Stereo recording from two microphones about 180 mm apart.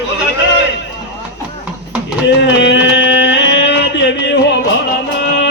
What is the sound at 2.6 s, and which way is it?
Music, 90° left.